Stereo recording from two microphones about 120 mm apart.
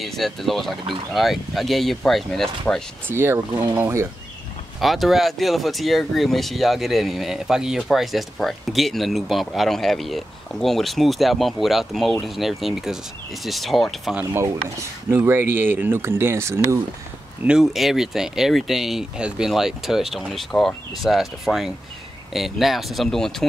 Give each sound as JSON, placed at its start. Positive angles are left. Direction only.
{"t": 0.0, "sound": "speech", "side_deg": 0}
{"t": 3.1, "sound": "speech", "side_deg": -20}
{"t": 4.7, "sound": "speech", "side_deg": 0}
{"t": 14.1, "sound": "speech", "side_deg": -20}
{"t": 17.5, "sound": "speech", "side_deg": -5}